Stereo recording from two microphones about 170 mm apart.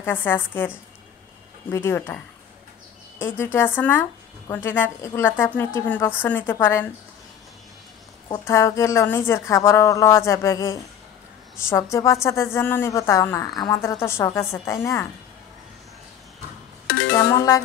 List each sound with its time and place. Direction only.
0.0 s speech: 10° left (ahead or behind)
1.7 s speech: 15° left (ahead or behind)
8.3 s a woman's voice: 15° left (ahead or behind)